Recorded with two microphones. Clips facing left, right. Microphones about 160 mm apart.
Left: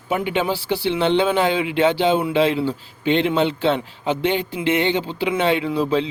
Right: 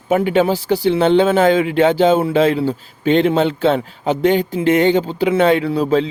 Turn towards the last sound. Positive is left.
turn(degrees=-45)  # may be behind; listen again after turning